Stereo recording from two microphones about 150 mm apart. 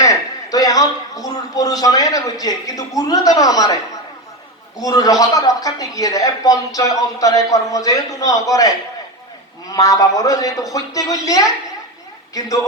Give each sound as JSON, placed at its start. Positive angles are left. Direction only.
{"t": 0.0, "sound": "a man's voice", "side_deg": 20}
{"t": 4.8, "sound": "a man's voice", "side_deg": 25}